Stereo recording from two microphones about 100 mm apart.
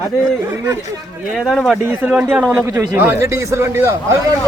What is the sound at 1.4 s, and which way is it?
Speech, centre (ahead or behind).